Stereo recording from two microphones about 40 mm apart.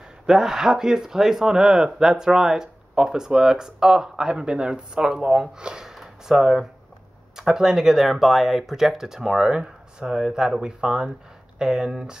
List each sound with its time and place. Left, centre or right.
0.3 s speech: centre
5.9 s speech: centre